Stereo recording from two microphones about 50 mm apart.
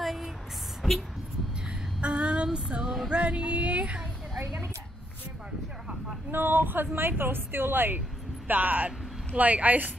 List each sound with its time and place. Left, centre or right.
0.0 s a sound: centre
2.0 s female singing: right
3.1 s speech: right
6.3 s a woman's voice: right